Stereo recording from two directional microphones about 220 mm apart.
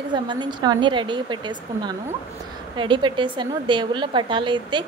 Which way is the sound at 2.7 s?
20° right (ahead or behind).